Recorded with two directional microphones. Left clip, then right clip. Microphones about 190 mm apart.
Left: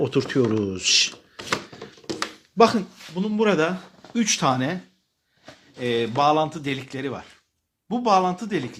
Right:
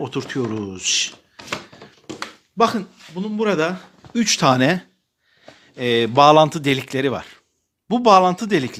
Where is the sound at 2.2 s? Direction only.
Centre (ahead or behind).